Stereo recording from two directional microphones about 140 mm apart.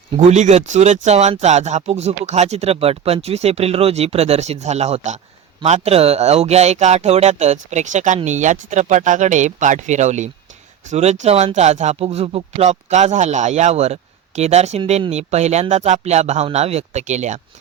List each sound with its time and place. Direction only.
0.2 s speech: 60° right (ahead or behind)